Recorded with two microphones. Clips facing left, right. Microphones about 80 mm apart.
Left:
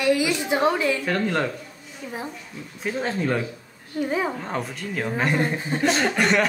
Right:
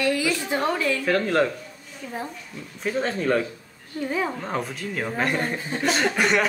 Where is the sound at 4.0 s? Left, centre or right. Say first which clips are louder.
Left 2 dB; centre.